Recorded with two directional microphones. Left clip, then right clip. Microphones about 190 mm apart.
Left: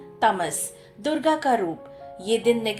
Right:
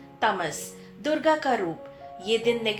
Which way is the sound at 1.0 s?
45° left (ahead or behind).